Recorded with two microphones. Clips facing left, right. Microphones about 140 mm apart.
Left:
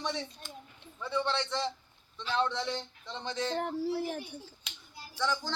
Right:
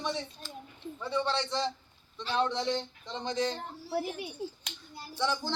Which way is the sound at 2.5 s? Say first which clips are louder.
Right 4 dB; 20° right (ahead or behind).